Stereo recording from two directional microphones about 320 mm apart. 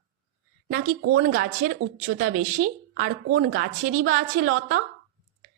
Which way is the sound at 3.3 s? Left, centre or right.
Right.